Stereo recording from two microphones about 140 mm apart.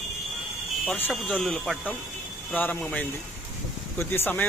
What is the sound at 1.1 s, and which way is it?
Speech, 5° left (ahead or behind).